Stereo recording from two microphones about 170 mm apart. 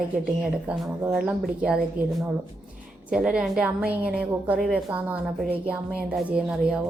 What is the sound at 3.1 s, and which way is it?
A woman's voice, 5° right (ahead or behind).